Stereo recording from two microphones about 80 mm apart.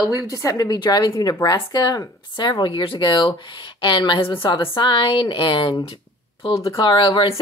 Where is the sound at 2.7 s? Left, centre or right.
Left.